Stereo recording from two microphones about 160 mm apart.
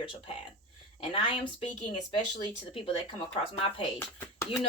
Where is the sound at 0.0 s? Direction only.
35° left (ahead or behind).